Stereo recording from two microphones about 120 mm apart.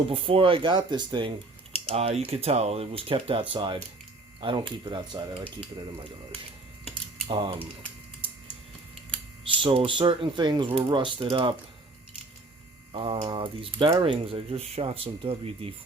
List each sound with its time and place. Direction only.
0.1 s speech: 50° right (ahead or behind)
1.9 s speech: 60° right (ahead or behind); by 5.4 s 40° right (ahead or behind)
7.3 s speech: 45° right (ahead or behind)
9.7 s speech: 45° right (ahead or behind)
12.9 s speech: 45° right (ahead or behind)